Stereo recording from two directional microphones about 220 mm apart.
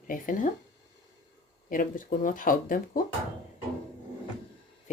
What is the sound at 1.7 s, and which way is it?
Speech, 40° left (ahead or behind).